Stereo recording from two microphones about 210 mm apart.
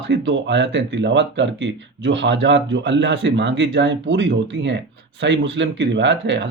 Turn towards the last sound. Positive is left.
turn(degrees=-60)  # may be behind; listen again after turning